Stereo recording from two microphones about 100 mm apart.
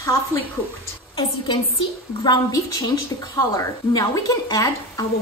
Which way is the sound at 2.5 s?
35° left (ahead or behind).